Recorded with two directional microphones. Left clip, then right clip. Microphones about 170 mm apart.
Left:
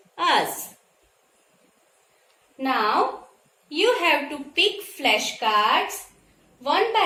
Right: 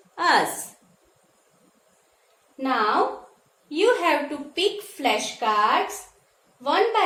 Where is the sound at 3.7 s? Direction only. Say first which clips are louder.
Even; 50° right (ahead or behind).